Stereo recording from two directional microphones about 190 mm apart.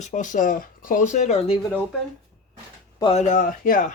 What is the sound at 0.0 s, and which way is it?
Speech, 40° left (ahead or behind).